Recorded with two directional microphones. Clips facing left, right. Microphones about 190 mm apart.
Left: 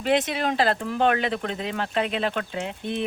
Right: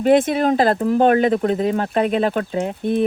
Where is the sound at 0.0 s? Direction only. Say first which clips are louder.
Right 8 dB; 50° right (ahead or behind).